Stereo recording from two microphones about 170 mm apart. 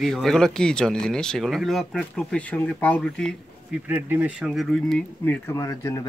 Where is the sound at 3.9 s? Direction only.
10° right (ahead or behind).